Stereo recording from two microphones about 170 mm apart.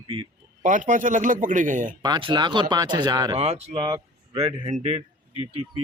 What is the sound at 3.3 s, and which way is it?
Speech, 40° right (ahead or behind).